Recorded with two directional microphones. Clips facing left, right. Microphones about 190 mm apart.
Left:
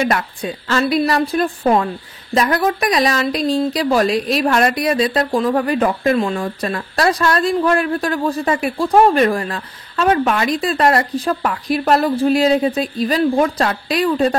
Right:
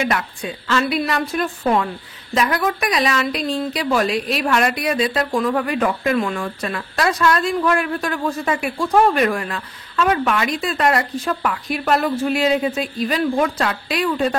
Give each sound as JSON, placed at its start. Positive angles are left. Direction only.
{"t": 0.0, "sound": "speech", "side_deg": 40}